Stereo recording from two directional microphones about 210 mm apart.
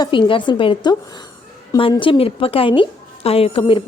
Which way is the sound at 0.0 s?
25° left (ahead or behind).